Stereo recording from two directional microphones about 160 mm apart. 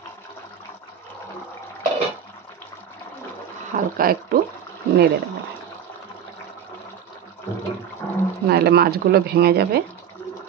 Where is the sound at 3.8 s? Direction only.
65° right (ahead or behind).